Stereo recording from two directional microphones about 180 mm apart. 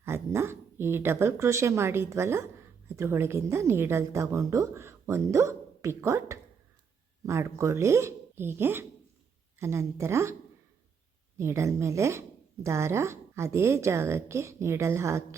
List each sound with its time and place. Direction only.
0.0 s a woman's voice: 15° right (ahead or behind)
11.3 s a woman's voice: 15° right (ahead or behind)